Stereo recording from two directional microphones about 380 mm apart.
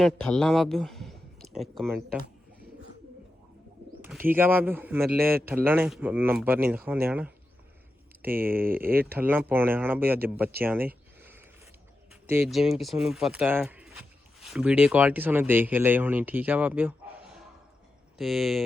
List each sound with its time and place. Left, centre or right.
0.0 s speech: centre
4.0 s speech: centre
8.6 s speech: right
9.0 s speech: centre
10.6 s a sound: centre
12.3 s speech: centre